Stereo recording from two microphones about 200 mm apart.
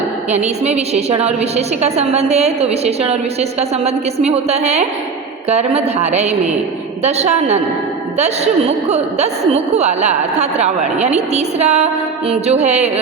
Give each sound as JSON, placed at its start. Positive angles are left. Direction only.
{"t": 0.3, "sound": "a woman's voice", "side_deg": -35}
{"t": 8.9, "sound": "a woman's voice", "side_deg": -35}